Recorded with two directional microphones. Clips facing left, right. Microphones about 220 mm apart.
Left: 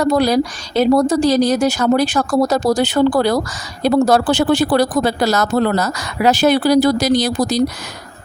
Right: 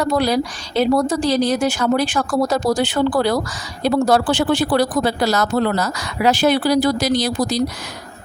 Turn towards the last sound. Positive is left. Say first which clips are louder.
# left 3 dB
turn(degrees=45)  # may be behind; listen again after turning